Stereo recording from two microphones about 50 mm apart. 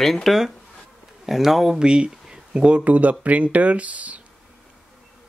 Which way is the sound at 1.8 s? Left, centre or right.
Centre.